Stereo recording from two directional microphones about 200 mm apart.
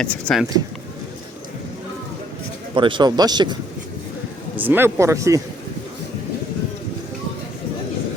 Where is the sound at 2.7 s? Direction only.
25° right (ahead or behind).